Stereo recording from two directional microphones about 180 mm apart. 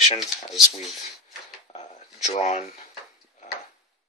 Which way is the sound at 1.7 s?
35° left (ahead or behind).